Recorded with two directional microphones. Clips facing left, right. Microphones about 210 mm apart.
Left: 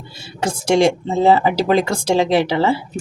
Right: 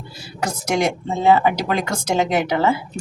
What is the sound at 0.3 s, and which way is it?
Speech, 30° left (ahead or behind).